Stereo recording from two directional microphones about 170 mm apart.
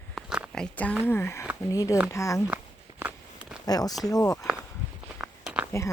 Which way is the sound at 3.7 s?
20° left (ahead or behind).